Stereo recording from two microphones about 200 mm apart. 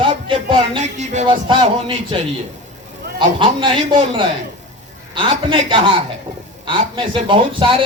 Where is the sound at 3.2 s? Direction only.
25° right (ahead or behind).